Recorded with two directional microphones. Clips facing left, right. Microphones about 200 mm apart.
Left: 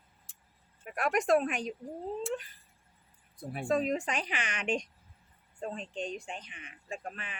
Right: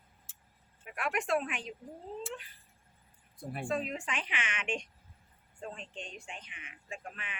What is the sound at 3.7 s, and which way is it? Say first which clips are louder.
Speech: left 7 dB; 40° left (ahead or behind).